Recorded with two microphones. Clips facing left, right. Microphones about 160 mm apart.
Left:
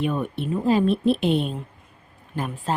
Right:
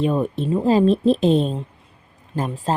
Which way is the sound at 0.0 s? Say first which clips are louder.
Right 5 dB; 35° right (ahead or behind).